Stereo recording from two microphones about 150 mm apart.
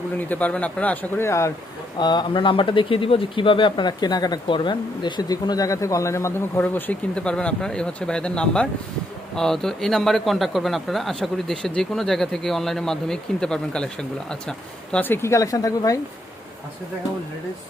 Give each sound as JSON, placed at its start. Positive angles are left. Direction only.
{"t": 0.3, "sound": "speech", "side_deg": 10}